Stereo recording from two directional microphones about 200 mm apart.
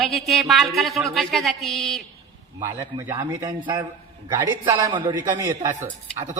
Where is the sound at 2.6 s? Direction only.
15° right (ahead or behind).